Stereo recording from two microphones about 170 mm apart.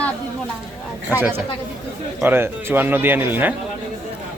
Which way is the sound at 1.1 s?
10° right (ahead or behind).